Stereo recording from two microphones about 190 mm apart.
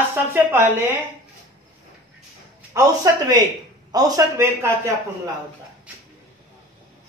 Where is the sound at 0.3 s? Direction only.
10° right (ahead or behind).